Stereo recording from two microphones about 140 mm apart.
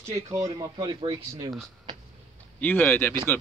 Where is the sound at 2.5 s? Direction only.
15° left (ahead or behind).